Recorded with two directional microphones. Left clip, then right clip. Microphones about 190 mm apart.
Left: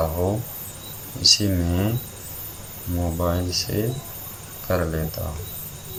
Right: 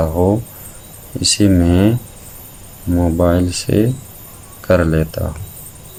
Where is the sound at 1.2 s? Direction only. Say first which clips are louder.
Right 5 dB; 45° right (ahead or behind).